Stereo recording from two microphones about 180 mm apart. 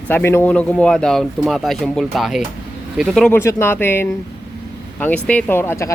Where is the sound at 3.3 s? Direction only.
15° left (ahead or behind).